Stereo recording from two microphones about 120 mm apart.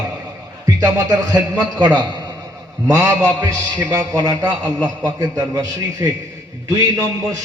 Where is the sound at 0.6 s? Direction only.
20° right (ahead or behind).